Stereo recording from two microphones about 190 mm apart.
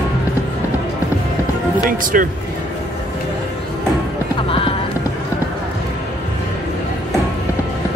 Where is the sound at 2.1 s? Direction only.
45° right (ahead or behind).